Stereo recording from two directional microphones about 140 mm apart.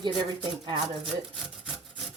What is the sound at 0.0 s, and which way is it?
Speech, 35° right (ahead or behind).